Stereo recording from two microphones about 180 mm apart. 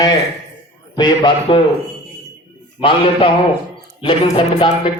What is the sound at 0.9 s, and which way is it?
Speech, 20° left (ahead or behind).